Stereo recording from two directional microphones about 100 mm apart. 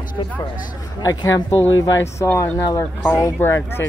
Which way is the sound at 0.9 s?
35° left (ahead or behind).